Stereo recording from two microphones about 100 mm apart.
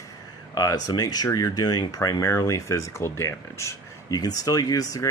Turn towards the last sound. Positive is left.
turn(degrees=35)  # may be behind; listen again after turning